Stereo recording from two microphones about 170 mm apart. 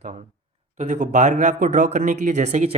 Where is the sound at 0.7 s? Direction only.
45° right (ahead or behind).